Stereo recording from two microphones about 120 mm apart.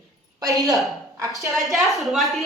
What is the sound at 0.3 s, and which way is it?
A woman's voice, 30° right (ahead or behind).